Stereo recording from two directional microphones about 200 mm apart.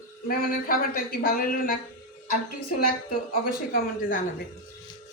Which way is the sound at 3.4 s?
45° left (ahead or behind).